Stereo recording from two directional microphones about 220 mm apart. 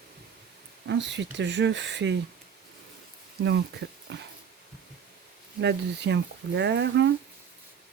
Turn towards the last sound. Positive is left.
turn(degrees=-50)  # may be behind; listen again after turning